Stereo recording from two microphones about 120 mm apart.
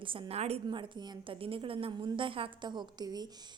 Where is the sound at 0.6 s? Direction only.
40° right (ahead or behind).